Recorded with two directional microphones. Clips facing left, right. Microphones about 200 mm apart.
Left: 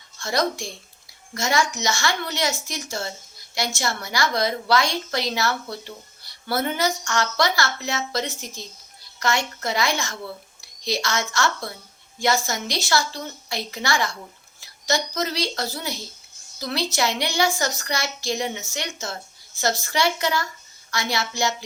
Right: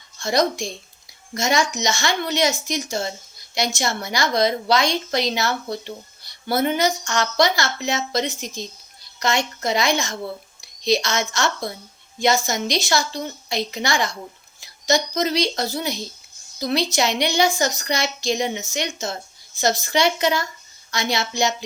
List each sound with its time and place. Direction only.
0.2 s a woman's voice: 20° right (ahead or behind)